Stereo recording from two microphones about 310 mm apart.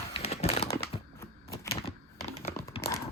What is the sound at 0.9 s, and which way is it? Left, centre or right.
Computer keyboard, centre.